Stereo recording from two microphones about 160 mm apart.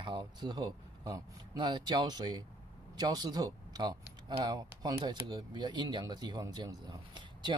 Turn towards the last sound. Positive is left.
turn(degrees=-30)  # may be behind; listen again after turning